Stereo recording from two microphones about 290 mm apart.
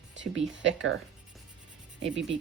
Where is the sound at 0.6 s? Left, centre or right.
Right.